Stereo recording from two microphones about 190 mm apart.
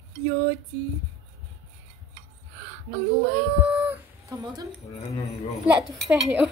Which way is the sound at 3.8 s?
15° right (ahead or behind).